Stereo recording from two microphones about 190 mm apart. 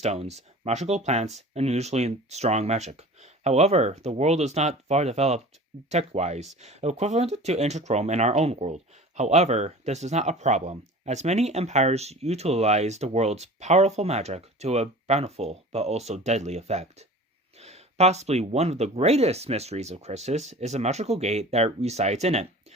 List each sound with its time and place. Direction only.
0.0 s speech: 35° right (ahead or behind)